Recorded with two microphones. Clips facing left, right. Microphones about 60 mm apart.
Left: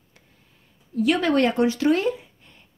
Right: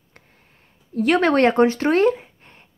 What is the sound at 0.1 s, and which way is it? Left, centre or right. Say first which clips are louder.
Speech: right 5 dB; right.